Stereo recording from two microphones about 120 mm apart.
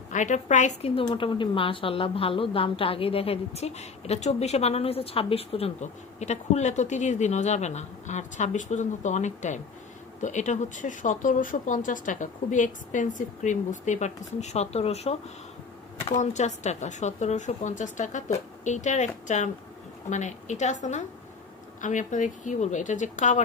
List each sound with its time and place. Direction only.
0.1 s a woman's voice: 90° left
1.0 s a woman's voice: 45° left (ahead or behind)
5.8 s speech: 70° left (ahead or behind)
16.1 s a woman's voice: 75° left (ahead or behind)
21.8 s speech: 90° left